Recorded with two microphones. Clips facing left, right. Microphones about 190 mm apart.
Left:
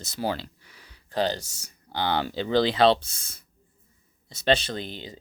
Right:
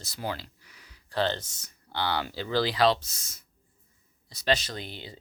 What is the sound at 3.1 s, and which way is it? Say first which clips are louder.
Speech: left 2 dB; 55° left (ahead or behind).